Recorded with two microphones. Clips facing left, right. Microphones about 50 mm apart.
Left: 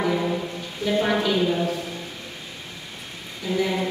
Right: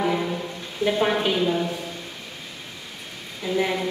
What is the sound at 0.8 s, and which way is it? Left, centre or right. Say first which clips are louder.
Speech: even; right.